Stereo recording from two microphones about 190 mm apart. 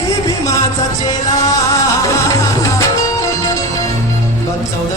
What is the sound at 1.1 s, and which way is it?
Music, 20° left (ahead or behind).